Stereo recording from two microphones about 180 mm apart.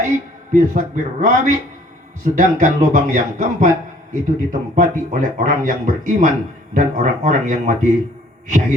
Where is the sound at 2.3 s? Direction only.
45° right (ahead or behind).